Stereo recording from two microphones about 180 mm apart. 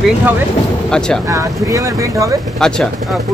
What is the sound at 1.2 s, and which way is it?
Speech, 20° right (ahead or behind).